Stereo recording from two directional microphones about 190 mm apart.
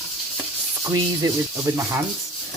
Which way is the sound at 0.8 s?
20° right (ahead or behind).